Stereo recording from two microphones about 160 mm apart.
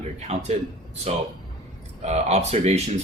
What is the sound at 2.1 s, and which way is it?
Speech, 40° right (ahead or behind).